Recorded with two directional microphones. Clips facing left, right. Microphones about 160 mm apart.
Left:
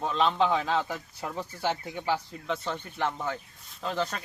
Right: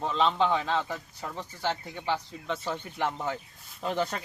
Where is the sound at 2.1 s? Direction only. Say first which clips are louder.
Left 1 dB; centre (ahead or behind).